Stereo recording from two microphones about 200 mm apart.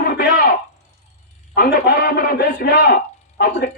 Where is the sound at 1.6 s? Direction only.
50° left (ahead or behind).